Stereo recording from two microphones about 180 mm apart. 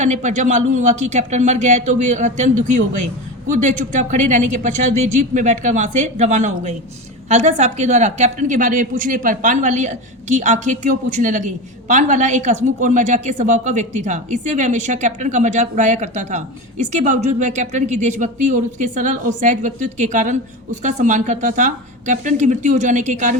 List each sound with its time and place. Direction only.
0.0 s speech: 40° right (ahead or behind)